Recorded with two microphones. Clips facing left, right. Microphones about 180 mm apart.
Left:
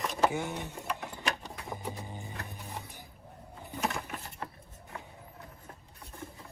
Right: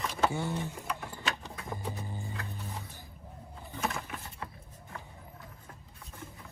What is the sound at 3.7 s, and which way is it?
Bird, 15° left (ahead or behind).